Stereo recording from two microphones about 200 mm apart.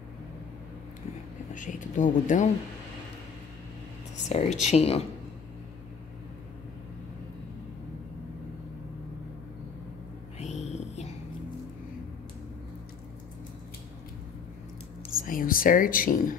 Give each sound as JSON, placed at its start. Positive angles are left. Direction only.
{"t": 1.5, "sound": "speech", "side_deg": 40}
{"t": 4.3, "sound": "speech", "side_deg": 35}
{"t": 10.4, "sound": "music", "side_deg": 35}
{"t": 15.1, "sound": "speech", "side_deg": 45}